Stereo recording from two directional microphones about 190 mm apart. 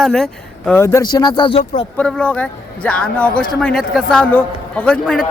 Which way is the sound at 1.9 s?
10° left (ahead or behind).